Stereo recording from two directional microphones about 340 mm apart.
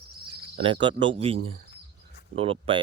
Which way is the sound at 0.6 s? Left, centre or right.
Centre.